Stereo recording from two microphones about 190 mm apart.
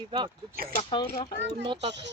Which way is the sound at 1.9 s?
65° right (ahead or behind).